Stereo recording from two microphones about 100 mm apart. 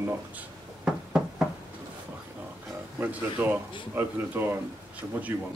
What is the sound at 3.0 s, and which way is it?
Speech, 20° right (ahead or behind).